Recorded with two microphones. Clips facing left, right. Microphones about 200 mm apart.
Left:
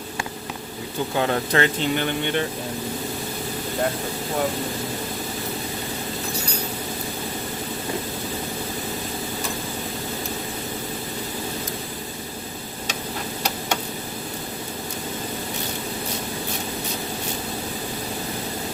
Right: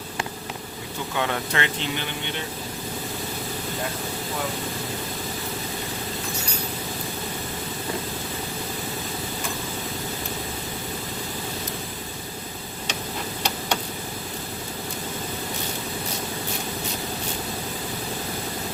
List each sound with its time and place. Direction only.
1.1 s speech: 35° left (ahead or behind)